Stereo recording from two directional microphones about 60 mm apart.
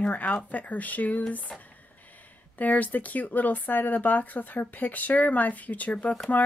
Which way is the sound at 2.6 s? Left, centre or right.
Left.